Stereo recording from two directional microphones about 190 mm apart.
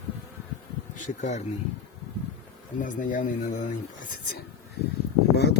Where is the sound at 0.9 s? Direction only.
40° left (ahead or behind).